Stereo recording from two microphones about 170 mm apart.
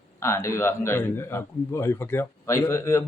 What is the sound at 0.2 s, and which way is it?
A man's voice, 15° left (ahead or behind).